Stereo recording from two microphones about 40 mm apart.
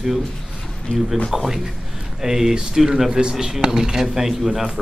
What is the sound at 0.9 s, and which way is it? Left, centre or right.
Speech, left.